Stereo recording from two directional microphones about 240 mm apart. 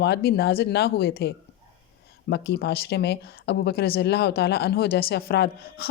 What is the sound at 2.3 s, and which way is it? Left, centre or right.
Speech, left.